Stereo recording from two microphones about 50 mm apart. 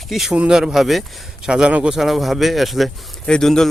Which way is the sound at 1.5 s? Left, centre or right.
Centre.